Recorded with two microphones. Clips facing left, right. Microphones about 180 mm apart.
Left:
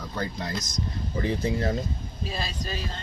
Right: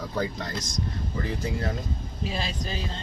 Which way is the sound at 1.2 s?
20° left (ahead or behind).